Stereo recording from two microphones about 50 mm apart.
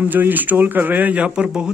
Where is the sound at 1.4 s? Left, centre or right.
Centre.